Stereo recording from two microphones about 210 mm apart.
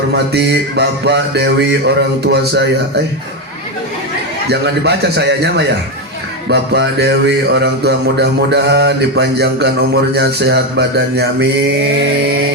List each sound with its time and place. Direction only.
0.1 s music: 55° right (ahead or behind)
4.4 s music: 50° right (ahead or behind)